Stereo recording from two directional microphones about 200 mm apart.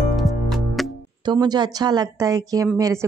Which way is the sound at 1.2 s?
20° right (ahead or behind).